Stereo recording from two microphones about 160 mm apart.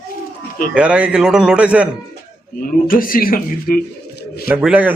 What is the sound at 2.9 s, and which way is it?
Speech, 60° left (ahead or behind).